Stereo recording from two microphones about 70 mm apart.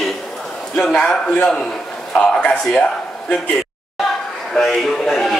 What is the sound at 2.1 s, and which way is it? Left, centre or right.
Speech, centre.